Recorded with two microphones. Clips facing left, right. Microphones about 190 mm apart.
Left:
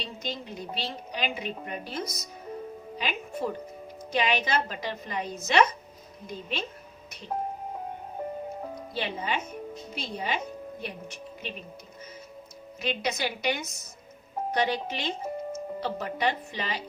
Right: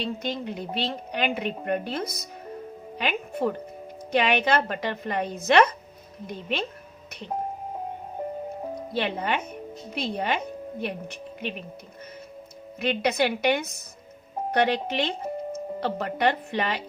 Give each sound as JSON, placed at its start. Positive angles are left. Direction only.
{"t": 0.0, "sound": "a woman's voice", "side_deg": -60}
{"t": 8.9, "sound": "a woman's voice", "side_deg": -60}
{"t": 12.8, "sound": "a woman's voice", "side_deg": -60}